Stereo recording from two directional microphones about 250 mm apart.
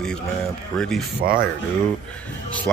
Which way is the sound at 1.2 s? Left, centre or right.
Right.